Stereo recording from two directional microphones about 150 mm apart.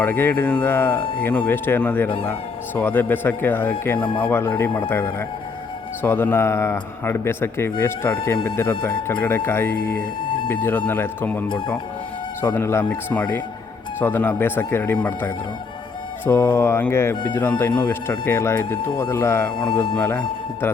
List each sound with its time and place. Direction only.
0.0 s speech: 10° left (ahead or behind)
3.9 s speech: 35° left (ahead or behind)
4.2 s speech: 15° left (ahead or behind)
10.2 s music: 35° left (ahead or behind)
10.5 s speech: 15° left (ahead or behind)
11.4 s speech: 35° left (ahead or behind)
12.4 s speech: 15° left (ahead or behind)
16.2 s speech: 15° left (ahead or behind)
19.5 s speech: 35° left (ahead or behind)
20.0 s speech: 15° left (ahead or behind)